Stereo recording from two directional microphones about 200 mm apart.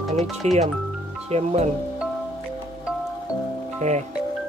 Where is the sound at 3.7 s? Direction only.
35° right (ahead or behind).